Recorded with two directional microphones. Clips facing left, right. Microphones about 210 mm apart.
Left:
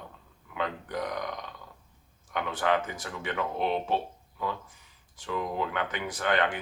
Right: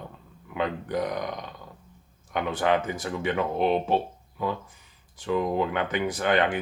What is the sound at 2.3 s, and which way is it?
Speech, 20° right (ahead or behind).